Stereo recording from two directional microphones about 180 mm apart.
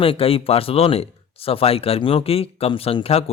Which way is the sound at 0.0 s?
30° left (ahead or behind).